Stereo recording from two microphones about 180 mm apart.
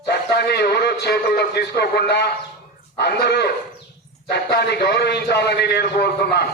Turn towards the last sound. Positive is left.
turn(degrees=65)  # may be behind; listen again after turning